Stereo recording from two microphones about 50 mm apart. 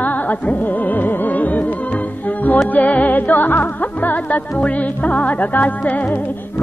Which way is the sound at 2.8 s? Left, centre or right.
Left.